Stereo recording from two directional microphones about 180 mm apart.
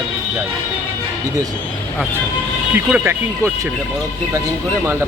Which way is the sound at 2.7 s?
10° right (ahead or behind).